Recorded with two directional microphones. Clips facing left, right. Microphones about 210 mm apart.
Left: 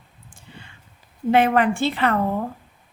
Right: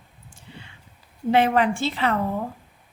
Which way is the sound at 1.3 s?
55° left (ahead or behind).